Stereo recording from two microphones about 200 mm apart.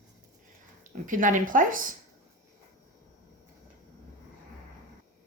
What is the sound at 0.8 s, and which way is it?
A woman's voice, 40° right (ahead or behind).